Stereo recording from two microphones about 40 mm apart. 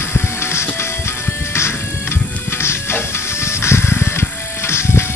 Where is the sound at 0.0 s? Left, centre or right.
Left.